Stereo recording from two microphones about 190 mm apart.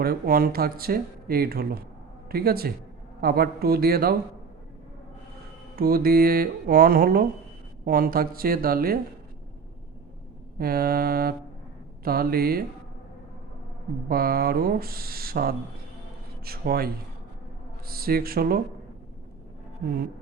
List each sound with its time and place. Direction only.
0.0 s speech: 50° right (ahead or behind)
5.7 s speech: 50° right (ahead or behind)
10.6 s speech: 50° right (ahead or behind)
14.1 s speech: 50° right (ahead or behind)